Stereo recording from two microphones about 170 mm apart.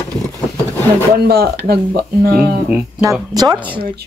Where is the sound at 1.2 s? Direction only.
65° right (ahead or behind).